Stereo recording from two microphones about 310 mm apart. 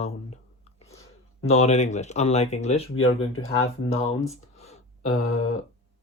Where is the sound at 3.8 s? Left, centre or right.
Centre.